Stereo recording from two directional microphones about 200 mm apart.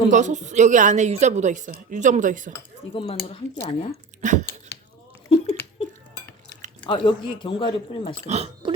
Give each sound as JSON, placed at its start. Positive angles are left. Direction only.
{"t": 0.1, "sound": "a woman's voice", "side_deg": -40}
{"t": 2.9, "sound": "speech", "side_deg": 30}
{"t": 4.2, "sound": "a sound", "side_deg": -35}
{"t": 6.8, "sound": "speech", "side_deg": 25}
{"t": 8.3, "sound": "speech", "side_deg": -30}